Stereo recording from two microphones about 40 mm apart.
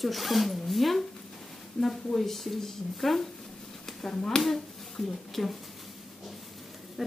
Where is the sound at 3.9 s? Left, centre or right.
Centre.